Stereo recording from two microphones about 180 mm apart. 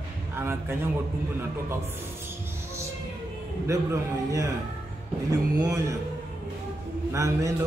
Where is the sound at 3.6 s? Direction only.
15° right (ahead or behind).